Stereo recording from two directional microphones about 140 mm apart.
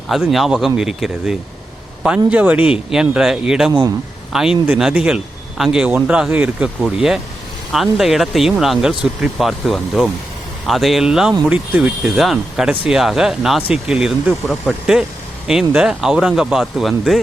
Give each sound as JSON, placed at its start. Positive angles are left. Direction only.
{"t": 0.1, "sound": "speech", "side_deg": 0}
{"t": 3.7, "sound": "speech", "side_deg": -25}
{"t": 4.3, "sound": "speech", "side_deg": -5}